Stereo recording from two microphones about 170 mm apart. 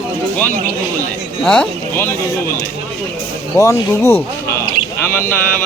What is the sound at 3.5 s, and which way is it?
Speech, 15° left (ahead or behind).